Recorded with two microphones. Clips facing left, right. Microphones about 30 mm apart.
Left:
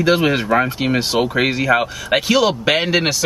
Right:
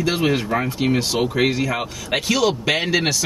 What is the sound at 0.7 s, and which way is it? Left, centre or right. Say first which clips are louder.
A man's voice: left 2 dB; left.